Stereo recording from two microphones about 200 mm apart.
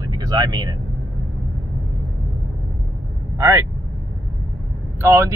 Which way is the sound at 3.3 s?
15° right (ahead or behind).